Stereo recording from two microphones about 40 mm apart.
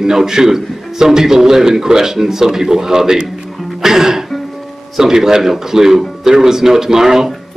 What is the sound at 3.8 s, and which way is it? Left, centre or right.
Music, centre.